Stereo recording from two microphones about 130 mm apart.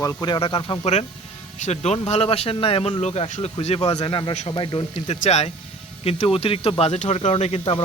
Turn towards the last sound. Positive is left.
turn(degrees=55)  # may be behind; listen again after turning